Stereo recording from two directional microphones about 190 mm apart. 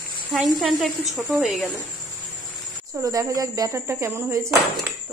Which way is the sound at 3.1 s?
15° right (ahead or behind).